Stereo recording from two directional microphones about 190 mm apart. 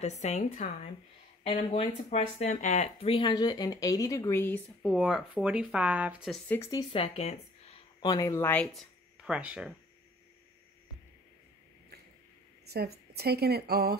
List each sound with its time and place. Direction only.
0.0 s a woman's voice: 35° left (ahead or behind); by 4.9 s 10° left (ahead or behind)
4.9 s speech: 5° right (ahead or behind)
6.5 s speech: 15° left (ahead or behind); by 7.3 s 30° left (ahead or behind)
8.0 s speech: 20° left (ahead or behind); by 9.7 s 5° right (ahead or behind)
12.6 s a woman's voice: 55° right (ahead or behind)